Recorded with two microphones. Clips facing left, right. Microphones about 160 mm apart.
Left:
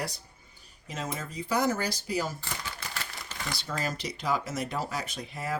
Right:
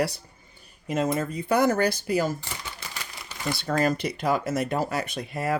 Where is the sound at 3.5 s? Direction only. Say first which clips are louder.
Right 10 dB; 60° right (ahead or behind).